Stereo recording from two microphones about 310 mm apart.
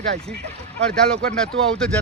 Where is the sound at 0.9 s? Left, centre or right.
Centre.